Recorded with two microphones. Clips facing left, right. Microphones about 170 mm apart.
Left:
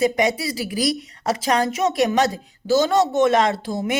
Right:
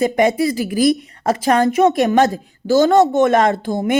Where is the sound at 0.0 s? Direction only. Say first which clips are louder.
Right 5 dB; 50° right (ahead or behind).